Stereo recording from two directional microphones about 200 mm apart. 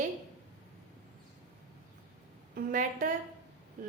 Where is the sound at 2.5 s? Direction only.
45° right (ahead or behind).